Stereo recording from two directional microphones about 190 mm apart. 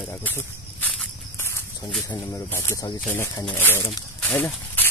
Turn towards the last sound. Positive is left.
turn(degrees=10)  # may be behind; listen again after turning